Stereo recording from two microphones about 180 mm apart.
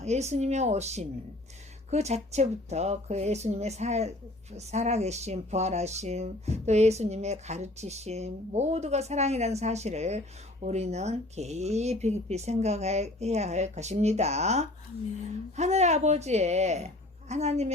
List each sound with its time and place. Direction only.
0.0 s speech: 40° right (ahead or behind)